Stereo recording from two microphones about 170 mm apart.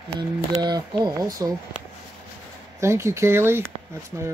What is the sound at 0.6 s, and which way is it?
Speech, 25° right (ahead or behind).